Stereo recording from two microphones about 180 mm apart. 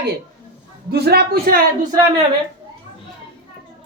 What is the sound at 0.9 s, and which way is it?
Speech, 65° right (ahead or behind).